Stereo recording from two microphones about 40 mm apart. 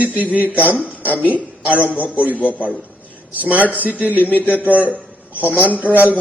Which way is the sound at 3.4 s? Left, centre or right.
Right.